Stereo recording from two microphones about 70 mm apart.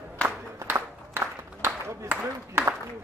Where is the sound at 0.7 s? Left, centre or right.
Right.